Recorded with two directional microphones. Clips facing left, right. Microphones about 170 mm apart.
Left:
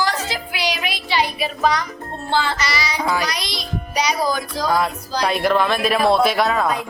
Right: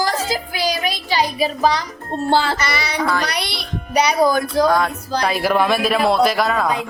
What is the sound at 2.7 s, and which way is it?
Speech, 60° right (ahead or behind).